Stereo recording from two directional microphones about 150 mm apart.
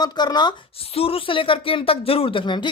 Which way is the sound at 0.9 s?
40° left (ahead or behind).